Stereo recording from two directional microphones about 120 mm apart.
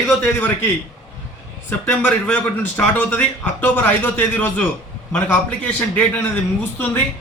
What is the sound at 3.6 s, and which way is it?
A man's voice, 15° left (ahead or behind).